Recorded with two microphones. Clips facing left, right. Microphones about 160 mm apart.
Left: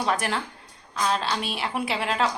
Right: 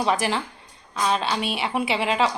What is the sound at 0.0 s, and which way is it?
A woman's voice, centre (ahead or behind).